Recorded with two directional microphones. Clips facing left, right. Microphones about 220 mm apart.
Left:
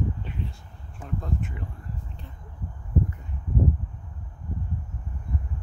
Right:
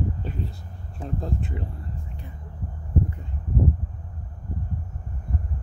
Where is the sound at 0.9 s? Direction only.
35° right (ahead or behind).